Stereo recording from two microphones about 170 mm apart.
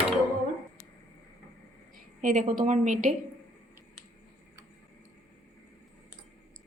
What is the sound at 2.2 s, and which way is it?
Speech, 50° right (ahead or behind).